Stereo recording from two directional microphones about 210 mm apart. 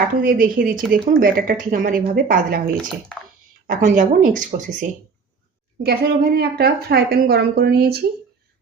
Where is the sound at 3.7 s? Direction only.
40° right (ahead or behind).